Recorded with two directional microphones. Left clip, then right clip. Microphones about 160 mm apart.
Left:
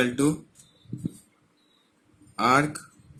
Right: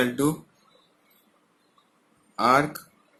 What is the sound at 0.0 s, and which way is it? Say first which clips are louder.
Speech: even; 40° left (ahead or behind).